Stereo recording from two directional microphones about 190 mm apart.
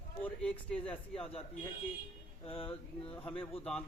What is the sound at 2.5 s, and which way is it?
Speech, 30° left (ahead or behind).